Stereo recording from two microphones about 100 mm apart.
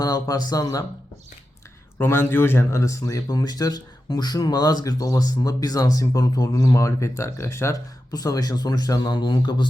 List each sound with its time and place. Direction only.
0.0 s speech: 40° left (ahead or behind)
2.0 s speech: 20° left (ahead or behind)
8.1 s speech: 40° left (ahead or behind)